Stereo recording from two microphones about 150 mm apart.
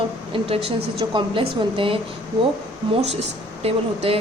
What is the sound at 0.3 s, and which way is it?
Speech, 40° right (ahead or behind).